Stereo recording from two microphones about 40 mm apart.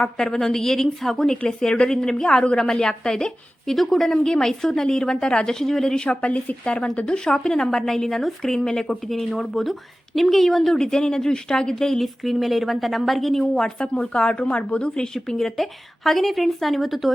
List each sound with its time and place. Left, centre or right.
0.2 s a woman's voice: centre
2.6 s a woman's voice: centre
3.8 s a woman's voice: centre
6.1 s a woman's voice: left
7.0 s a woman's voice: centre
9.0 s a woman's voice: centre
13.8 s a woman's voice: left
15.4 s a woman's voice: centre